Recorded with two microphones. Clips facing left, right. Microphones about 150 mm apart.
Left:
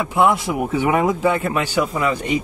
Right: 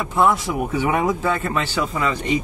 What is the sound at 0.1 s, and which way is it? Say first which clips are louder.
Speech: left 1 dB; 15° left (ahead or behind).